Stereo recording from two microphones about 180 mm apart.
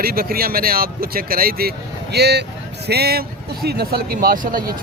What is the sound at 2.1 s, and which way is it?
Speech, 65° right (ahead or behind).